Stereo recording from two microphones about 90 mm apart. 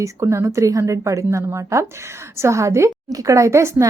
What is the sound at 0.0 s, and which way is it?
A woman's voice, 35° right (ahead or behind).